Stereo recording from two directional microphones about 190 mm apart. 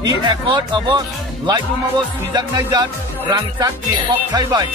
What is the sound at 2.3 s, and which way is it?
Speech, 20° right (ahead or behind).